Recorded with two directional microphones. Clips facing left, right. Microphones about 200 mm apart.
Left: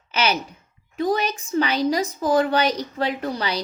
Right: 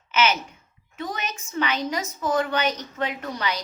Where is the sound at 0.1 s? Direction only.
35° left (ahead or behind).